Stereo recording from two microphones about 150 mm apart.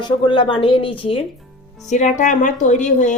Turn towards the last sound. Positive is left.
turn(degrees=55)  # may be behind; listen again after turning